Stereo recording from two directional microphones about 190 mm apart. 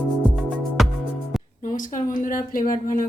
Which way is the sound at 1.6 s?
45° left (ahead or behind).